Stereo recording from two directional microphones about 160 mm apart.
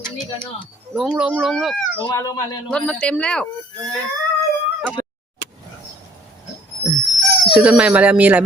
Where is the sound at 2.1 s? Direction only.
20° left (ahead or behind).